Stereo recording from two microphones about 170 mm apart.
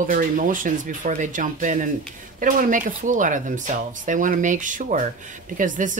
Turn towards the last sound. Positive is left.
turn(degrees=-45)  # may be behind; listen again after turning